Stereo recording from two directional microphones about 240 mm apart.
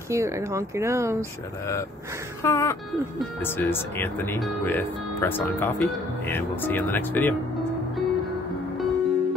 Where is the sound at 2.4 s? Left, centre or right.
Centre.